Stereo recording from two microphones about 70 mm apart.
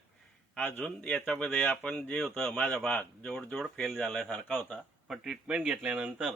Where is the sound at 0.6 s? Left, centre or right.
Left.